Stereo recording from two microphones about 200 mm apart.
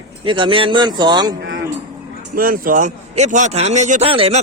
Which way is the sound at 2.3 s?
45° right (ahead or behind).